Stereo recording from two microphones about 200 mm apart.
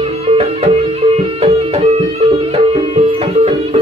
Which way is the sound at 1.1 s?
30° right (ahead or behind).